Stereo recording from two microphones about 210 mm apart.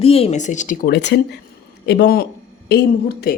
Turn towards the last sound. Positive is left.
turn(degrees=45)  # may be behind; listen again after turning